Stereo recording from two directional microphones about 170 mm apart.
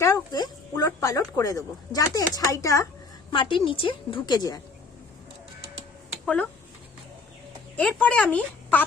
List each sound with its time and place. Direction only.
0.0 s a sound: 20° left (ahead or behind)
0.9 s speech: 15° left (ahead or behind)
3.3 s a woman's voice: 30° left (ahead or behind)
6.2 s speech: 5° left (ahead or behind)
7.8 s a woman's voice: 5° left (ahead or behind)